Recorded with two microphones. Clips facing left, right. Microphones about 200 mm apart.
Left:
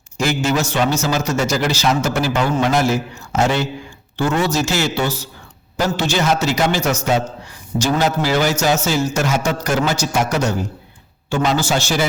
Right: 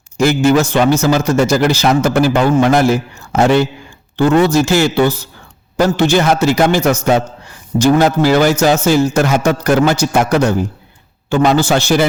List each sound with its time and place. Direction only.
0.2 s a man's voice: 55° right (ahead or behind)